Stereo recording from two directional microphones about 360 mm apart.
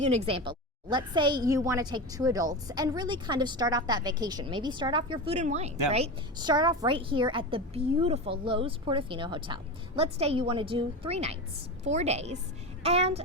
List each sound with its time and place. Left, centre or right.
0.0 s a woman's voice: centre